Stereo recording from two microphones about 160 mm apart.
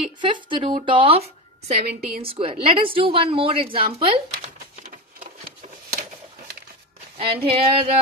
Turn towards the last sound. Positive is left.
turn(degrees=-35)  # may be behind; listen again after turning